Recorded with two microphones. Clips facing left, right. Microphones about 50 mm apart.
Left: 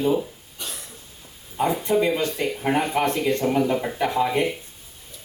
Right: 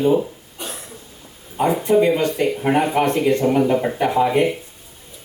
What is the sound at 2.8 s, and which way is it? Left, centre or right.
Speech, right.